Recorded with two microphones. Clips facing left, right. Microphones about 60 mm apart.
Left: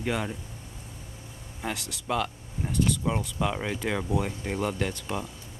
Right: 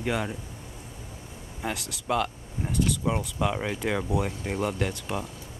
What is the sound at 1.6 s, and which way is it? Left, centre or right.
Speech, centre.